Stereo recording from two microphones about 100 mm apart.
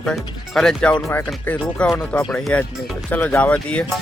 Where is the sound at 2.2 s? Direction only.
5° left (ahead or behind).